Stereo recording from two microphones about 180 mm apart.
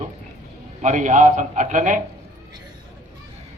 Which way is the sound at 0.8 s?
45° right (ahead or behind).